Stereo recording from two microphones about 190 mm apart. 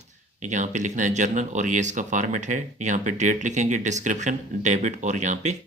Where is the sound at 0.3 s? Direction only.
40° right (ahead or behind).